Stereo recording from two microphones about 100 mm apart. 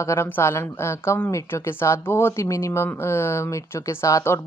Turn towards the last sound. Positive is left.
turn(degrees=30)  # may be behind; listen again after turning